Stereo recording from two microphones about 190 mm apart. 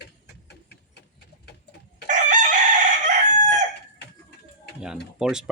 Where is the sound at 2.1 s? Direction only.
40° right (ahead or behind).